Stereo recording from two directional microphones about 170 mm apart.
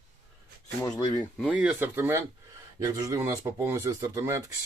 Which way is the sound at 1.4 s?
5° right (ahead or behind).